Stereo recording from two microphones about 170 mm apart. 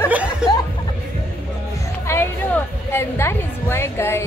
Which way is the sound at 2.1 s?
15° left (ahead or behind).